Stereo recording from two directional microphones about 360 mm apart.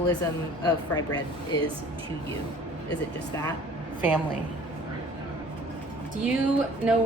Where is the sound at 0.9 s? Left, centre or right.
Centre.